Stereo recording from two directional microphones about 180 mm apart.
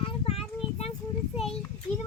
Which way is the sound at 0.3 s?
35° left (ahead or behind).